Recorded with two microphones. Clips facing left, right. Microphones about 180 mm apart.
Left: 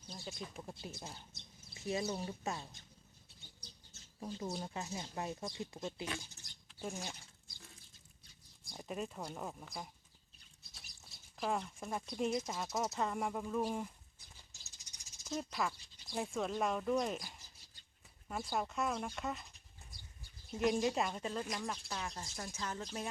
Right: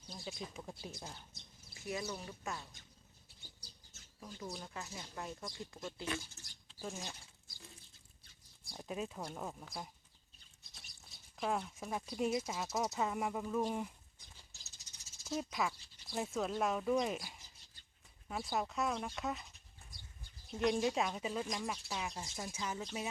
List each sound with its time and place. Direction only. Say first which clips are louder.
0.1 s speech: right 1 dB; centre (ahead or behind)
1.7 s speech: left 4 dB; 25° left (ahead or behind)
4.2 s speech: left 5 dB; 30° left (ahead or behind); by 7.1 s 10° left (ahead or behind)
8.8 s speech: even; centre (ahead or behind)
15.4 s speech: right 1 dB; 5° right (ahead or behind)
21.4 s speech: right 1 dB; 5° left (ahead or behind)
21.7 s speech: right 1 dB; 5° right (ahead or behind)